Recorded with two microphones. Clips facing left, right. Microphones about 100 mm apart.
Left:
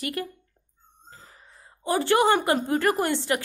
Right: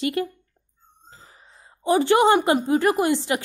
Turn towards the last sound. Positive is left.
turn(degrees=-20)  # may be behind; listen again after turning